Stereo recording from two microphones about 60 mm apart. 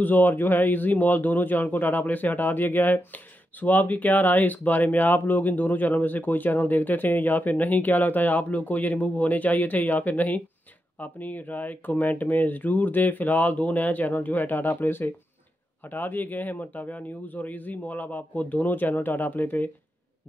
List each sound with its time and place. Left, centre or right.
0.0 s a man's voice: left